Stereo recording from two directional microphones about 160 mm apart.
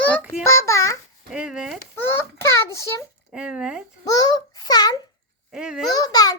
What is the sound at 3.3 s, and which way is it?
Speech, 5° right (ahead or behind).